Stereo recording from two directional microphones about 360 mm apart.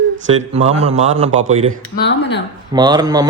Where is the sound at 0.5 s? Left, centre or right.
Centre.